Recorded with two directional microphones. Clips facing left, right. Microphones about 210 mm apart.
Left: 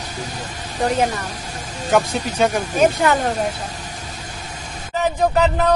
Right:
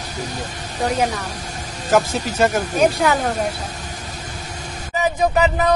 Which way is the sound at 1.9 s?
Centre (ahead or behind).